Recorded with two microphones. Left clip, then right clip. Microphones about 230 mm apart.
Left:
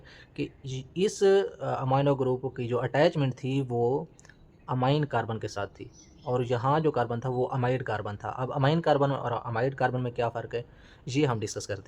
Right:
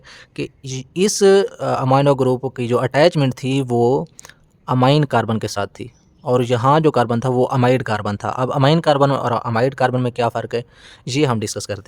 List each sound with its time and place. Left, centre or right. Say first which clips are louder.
0.3 s speech: right 8 dB; right